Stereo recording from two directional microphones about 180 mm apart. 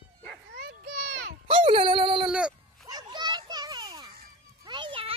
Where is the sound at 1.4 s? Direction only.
30° right (ahead or behind).